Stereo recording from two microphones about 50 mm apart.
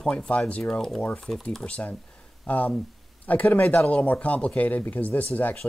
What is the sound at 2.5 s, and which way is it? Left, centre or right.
Speech, left.